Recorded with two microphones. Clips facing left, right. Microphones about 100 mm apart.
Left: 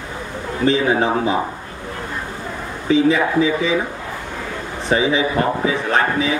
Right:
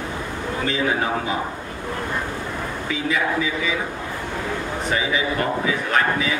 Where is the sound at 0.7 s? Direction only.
30° left (ahead or behind).